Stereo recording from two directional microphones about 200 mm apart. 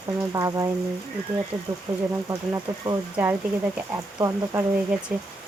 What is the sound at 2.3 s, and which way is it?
Speech, 15° right (ahead or behind).